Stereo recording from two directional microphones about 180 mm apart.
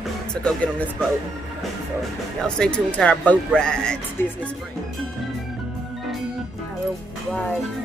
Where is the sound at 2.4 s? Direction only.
5° left (ahead or behind).